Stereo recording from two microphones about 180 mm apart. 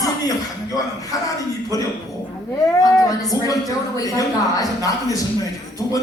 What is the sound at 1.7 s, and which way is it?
A man's voice, 20° left (ahead or behind).